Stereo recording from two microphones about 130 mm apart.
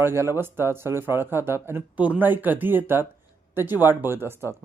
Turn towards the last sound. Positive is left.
turn(degrees=-20)  # may be behind; listen again after turning